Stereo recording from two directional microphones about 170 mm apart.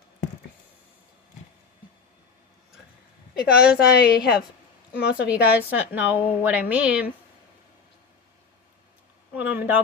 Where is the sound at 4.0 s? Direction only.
65° left (ahead or behind).